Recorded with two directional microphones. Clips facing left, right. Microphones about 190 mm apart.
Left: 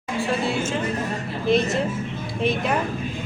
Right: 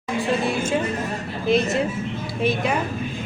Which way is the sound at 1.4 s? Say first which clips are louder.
Right 1 dB; centre (ahead or behind).